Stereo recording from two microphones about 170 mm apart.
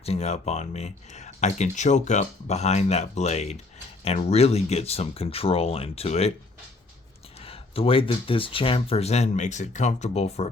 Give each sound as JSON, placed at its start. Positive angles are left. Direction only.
{"t": 0.0, "sound": "speech", "side_deg": 35}
{"t": 7.3, "sound": "speech", "side_deg": 35}